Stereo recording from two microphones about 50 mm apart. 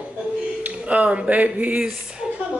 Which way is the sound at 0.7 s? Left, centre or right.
Right.